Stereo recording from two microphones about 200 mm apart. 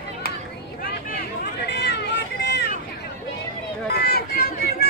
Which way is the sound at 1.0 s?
50° left (ahead or behind).